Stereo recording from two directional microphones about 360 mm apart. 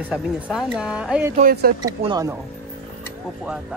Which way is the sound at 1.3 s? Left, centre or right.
Right.